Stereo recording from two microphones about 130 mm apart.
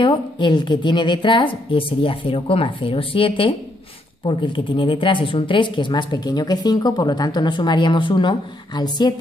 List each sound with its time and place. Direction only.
0.0 s speech: 35° left (ahead or behind)